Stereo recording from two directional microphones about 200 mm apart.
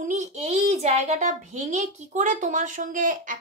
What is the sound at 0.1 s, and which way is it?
A child's voice, 35° right (ahead or behind).